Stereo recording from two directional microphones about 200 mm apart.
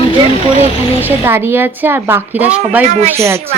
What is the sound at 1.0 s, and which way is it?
Speech, 10° right (ahead or behind).